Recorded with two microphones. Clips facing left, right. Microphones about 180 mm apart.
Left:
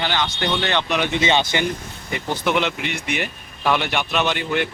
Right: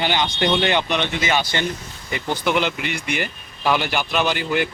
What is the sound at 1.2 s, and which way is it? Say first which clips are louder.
Speech: left 2 dB; 25° left (ahead or behind).